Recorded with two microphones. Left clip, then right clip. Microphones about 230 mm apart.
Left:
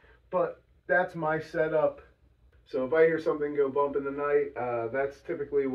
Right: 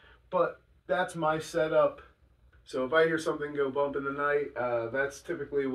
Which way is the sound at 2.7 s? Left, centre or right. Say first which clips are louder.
Left 2 dB; centre.